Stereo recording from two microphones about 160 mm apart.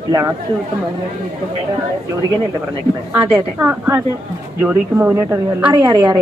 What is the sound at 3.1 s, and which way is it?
A woman's voice, 15° right (ahead or behind).